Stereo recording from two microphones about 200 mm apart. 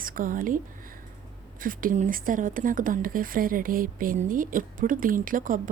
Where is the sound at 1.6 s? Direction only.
45° right (ahead or behind).